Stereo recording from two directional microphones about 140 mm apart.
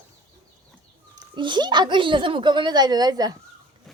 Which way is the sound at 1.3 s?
35° right (ahead or behind).